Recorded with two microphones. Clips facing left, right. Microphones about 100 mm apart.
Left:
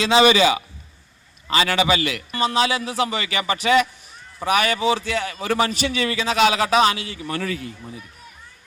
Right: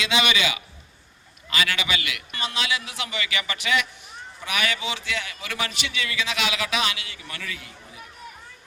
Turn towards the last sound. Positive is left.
turn(degrees=35)  # may be behind; listen again after turning